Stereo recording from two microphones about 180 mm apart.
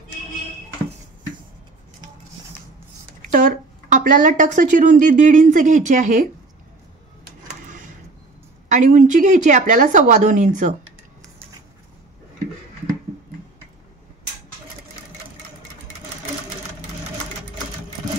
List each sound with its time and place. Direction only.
3.2 s speech: 50° right (ahead or behind)
8.6 s speech: 45° right (ahead or behind)